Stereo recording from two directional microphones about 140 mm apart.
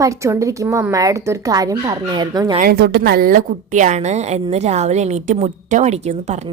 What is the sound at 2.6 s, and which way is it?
A woman's voice, 90° right.